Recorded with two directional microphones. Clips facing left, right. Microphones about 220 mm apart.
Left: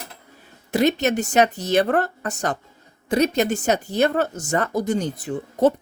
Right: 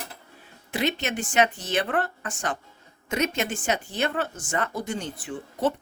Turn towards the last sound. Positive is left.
turn(degrees=40)  # may be behind; listen again after turning